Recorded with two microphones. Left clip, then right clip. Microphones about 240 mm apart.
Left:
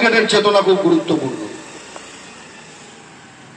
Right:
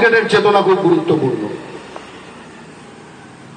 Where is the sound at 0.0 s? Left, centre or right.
Left.